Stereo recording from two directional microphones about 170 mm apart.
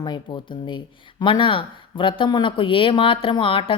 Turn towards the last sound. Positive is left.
turn(degrees=30)  # may be behind; listen again after turning